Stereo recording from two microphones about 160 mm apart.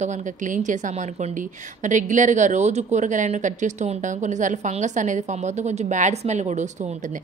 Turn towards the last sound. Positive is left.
turn(degrees=-45)  # may be behind; listen again after turning